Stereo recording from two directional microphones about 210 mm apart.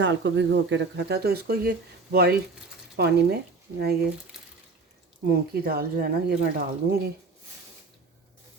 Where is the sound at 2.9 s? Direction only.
50° right (ahead or behind).